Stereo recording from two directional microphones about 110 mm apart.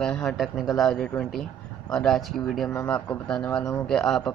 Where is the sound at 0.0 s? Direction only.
5° left (ahead or behind).